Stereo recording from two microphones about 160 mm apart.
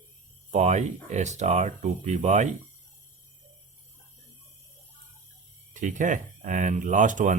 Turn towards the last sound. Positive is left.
turn(degrees=-50)  # may be behind; listen again after turning